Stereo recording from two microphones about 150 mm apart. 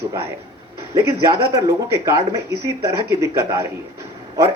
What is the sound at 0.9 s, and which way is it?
Speech, 20° right (ahead or behind).